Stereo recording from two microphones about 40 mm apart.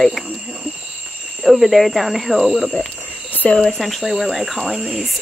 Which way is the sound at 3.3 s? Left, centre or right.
Left.